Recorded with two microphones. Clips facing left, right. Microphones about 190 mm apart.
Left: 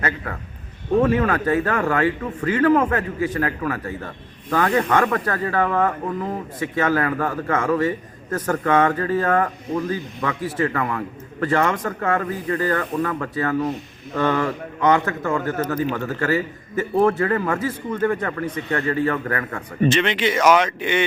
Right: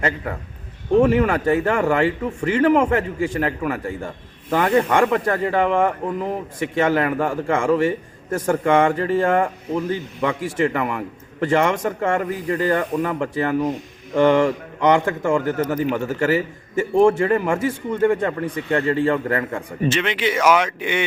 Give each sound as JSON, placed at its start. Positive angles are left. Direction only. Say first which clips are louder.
{"t": 1.0, "sound": "a man's voice", "louder": "right 2 dB", "side_deg": -15}
{"t": 8.9, "sound": "a man's voice", "louder": "right 2 dB", "side_deg": -25}
{"t": 9.4, "sound": "a man's voice", "louder": "right 1 dB", "side_deg": -10}
{"t": 16.2, "sound": "a man's voice", "louder": "right 1 dB", "side_deg": -25}
{"t": 16.9, "sound": "a man's voice", "louder": "right 3 dB", "side_deg": -15}
{"t": 18.0, "sound": "a man's voice", "louder": "right 4 dB", "side_deg": -25}
{"t": 19.5, "sound": "a man's voice", "louder": "left 2 dB", "side_deg": -5}